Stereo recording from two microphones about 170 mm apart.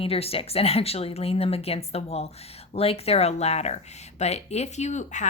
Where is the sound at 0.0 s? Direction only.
35° left (ahead or behind).